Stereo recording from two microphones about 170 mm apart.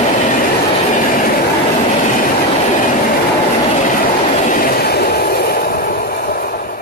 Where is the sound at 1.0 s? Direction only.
55° left (ahead or behind).